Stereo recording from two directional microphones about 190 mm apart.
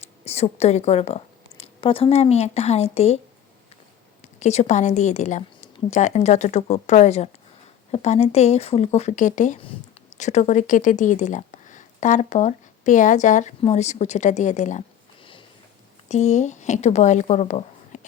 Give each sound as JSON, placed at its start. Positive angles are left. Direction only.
{"t": 0.3, "sound": "a woman's voice", "side_deg": 35}
{"t": 4.4, "sound": "a woman's voice", "side_deg": 35}
{"t": 15.2, "sound": "a sound", "side_deg": 25}
{"t": 16.0, "sound": "a woman's voice", "side_deg": 35}